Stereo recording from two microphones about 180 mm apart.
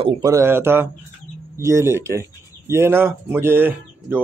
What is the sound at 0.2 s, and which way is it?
Speech, 15° right (ahead or behind).